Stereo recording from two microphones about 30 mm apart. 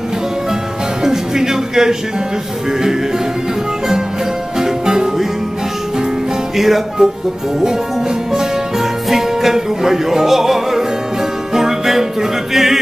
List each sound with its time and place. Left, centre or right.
1.0 s music: centre
4.6 s music: right
6.5 s music: centre
7.0 s speech: centre
8.7 s music: centre